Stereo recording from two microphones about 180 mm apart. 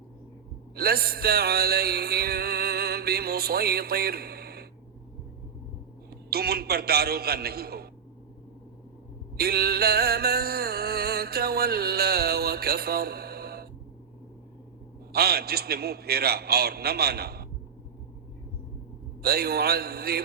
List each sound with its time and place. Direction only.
0.8 s music: 60° right (ahead or behind)
6.1 s a man's voice: 60° right (ahead or behind)
9.4 s music: 60° right (ahead or behind)
15.1 s music: 60° right (ahead or behind)
19.2 s music: 60° right (ahead or behind)